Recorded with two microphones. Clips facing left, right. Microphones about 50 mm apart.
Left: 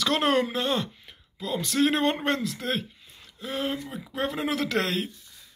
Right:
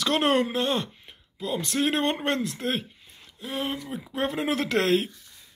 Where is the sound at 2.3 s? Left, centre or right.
Centre.